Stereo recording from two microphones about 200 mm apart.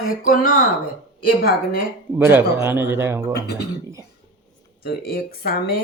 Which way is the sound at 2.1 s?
10° right (ahead or behind).